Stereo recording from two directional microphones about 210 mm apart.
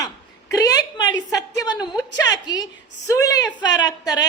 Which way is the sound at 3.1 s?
15° left (ahead or behind).